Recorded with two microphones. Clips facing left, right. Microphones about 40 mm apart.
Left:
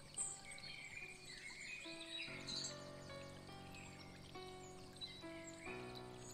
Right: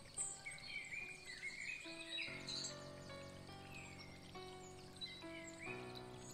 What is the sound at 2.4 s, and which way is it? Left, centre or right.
Music, right.